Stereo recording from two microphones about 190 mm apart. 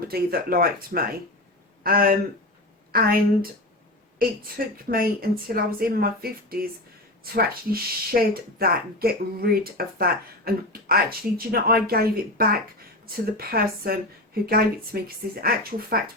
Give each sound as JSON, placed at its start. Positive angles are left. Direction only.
{"t": 0.1, "sound": "speech", "side_deg": -50}